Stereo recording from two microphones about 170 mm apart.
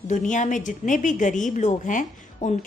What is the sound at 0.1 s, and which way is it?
A woman's voice, 45° left (ahead or behind).